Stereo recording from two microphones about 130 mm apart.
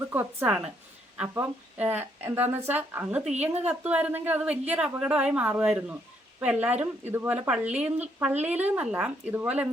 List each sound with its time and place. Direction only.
0.1 s a woman's voice: 15° right (ahead or behind)